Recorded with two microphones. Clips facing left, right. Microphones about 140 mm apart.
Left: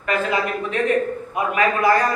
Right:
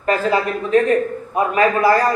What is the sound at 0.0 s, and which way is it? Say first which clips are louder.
A man's voice: right 4 dB; 35° right (ahead or behind).